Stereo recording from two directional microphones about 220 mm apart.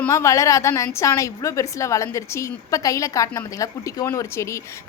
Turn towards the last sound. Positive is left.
turn(degrees=15)  # may be behind; listen again after turning